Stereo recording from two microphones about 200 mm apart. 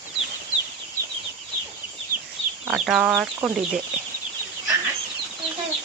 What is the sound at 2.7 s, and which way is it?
Speech, centre (ahead or behind).